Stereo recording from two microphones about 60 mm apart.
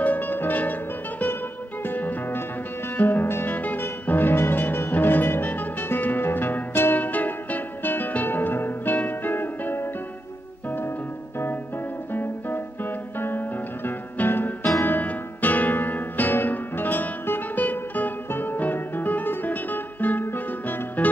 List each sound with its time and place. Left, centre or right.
0.0 s music: left
1.9 s music: left
12.1 s music: left